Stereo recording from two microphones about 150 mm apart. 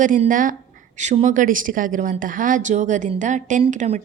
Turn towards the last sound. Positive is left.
turn(degrees=-55)  # may be behind; listen again after turning